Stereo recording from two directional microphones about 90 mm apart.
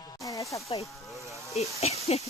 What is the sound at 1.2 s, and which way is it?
Speech, 35° right (ahead or behind).